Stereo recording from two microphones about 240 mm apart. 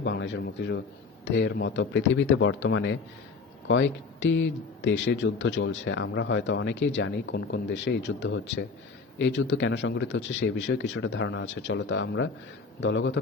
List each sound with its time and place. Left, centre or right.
0.0 s speech: left